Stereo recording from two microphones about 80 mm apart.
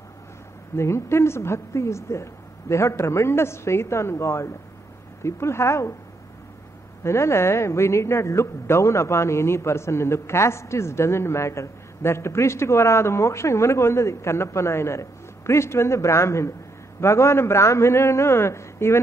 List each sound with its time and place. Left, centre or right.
0.7 s a woman's voice: left
7.0 s a woman's voice: left